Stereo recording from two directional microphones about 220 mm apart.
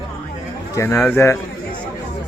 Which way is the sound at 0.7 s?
10° left (ahead or behind).